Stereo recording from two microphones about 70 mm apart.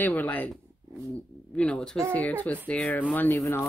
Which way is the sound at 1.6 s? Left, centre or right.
Centre.